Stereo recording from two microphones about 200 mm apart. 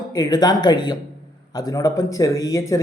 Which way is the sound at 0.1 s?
20° left (ahead or behind).